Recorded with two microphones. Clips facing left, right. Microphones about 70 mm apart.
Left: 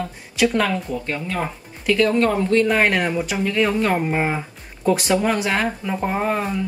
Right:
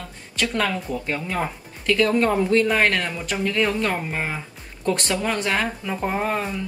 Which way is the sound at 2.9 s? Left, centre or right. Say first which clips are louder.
Left 4 dB; centre.